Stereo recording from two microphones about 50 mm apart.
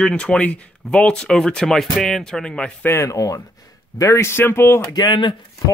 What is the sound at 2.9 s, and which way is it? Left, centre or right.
Speech, left.